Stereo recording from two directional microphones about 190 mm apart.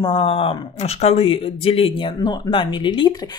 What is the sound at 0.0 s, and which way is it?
Speech, 25° left (ahead or behind).